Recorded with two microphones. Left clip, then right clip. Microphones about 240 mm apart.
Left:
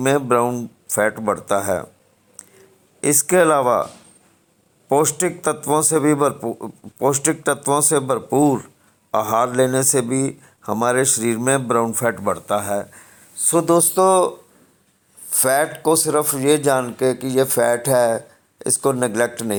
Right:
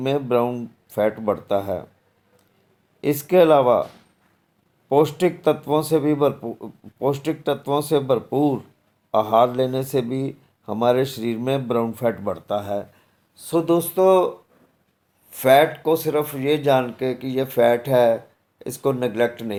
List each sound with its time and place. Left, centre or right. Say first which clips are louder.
0.0 s a man's voice: left 4 dB; left
3.0 s a man's voice: left 1 dB; left
4.9 s a man's voice: even; left
15.3 s a man's voice: right 3 dB; left